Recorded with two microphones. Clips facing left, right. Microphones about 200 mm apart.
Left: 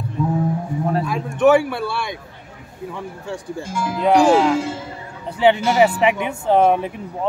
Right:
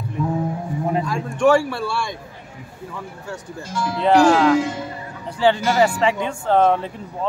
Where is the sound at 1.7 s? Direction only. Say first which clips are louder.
Left 1 dB; 20° left (ahead or behind).